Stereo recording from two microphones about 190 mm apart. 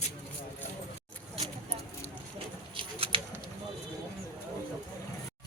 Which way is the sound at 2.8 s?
30° right (ahead or behind).